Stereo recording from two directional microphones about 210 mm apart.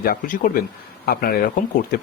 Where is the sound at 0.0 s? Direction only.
45° left (ahead or behind).